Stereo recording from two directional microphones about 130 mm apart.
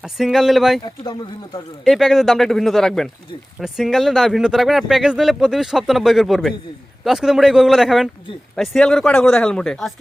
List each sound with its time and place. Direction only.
0.0 s speech: centre (ahead or behind)
0.9 s speech: 35° left (ahead or behind)
1.8 s speech: centre (ahead or behind)